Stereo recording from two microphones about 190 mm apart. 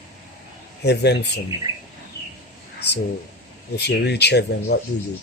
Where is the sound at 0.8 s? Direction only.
60° left (ahead or behind).